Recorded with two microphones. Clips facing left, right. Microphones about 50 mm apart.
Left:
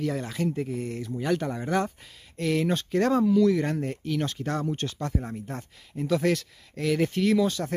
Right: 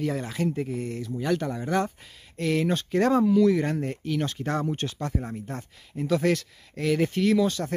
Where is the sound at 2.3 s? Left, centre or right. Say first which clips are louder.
Right 1 dB; centre.